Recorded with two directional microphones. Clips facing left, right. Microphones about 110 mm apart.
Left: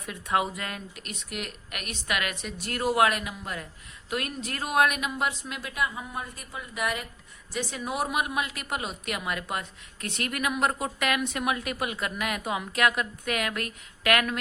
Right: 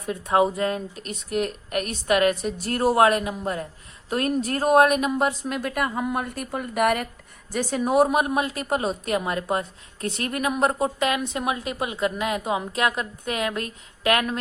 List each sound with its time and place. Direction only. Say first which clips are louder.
0.0 s a woman's voice: right 7 dB; 30° right (ahead or behind)